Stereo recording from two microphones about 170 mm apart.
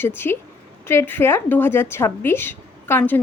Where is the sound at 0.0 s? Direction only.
15° left (ahead or behind).